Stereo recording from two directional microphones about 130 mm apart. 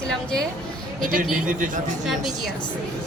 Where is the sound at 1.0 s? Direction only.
90° right.